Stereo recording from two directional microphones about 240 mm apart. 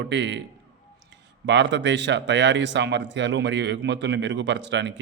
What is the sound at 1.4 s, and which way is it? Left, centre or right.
Speech, right.